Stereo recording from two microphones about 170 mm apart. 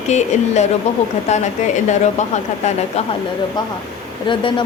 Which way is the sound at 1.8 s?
45° left (ahead or behind).